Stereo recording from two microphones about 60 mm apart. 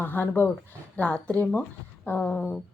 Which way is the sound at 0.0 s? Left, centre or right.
Left.